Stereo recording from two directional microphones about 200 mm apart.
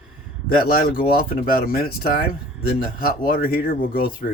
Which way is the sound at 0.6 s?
45° left (ahead or behind).